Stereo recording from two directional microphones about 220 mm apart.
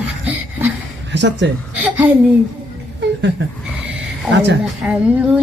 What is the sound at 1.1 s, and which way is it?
Speech, 55° right (ahead or behind).